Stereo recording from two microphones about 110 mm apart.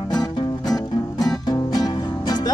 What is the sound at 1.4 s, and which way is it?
Music, 35° left (ahead or behind).